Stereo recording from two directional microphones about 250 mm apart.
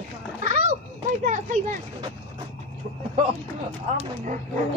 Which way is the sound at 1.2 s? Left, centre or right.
Right.